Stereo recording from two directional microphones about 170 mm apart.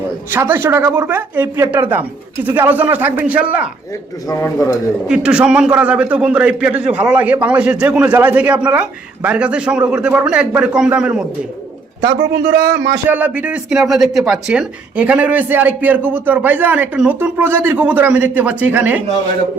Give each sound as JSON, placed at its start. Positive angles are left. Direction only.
{"t": 0.3, "sound": "speech", "side_deg": -10}
{"t": 4.3, "sound": "speech", "side_deg": 15}
{"t": 5.0, "sound": "speech", "side_deg": -5}
{"t": 12.2, "sound": "speech", "side_deg": -15}